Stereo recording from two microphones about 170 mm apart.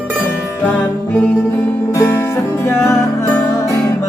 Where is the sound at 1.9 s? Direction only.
15° left (ahead or behind).